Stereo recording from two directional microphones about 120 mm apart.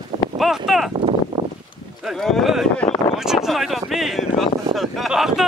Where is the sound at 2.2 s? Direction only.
Centre (ahead or behind).